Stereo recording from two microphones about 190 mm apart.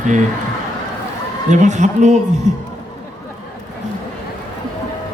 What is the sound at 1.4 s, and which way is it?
A man's voice, 40° right (ahead or behind).